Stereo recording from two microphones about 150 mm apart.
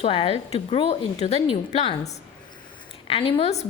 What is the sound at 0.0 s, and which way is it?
A woman's voice, 40° left (ahead or behind).